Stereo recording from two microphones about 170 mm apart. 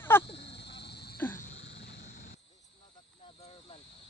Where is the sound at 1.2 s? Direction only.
10° left (ahead or behind).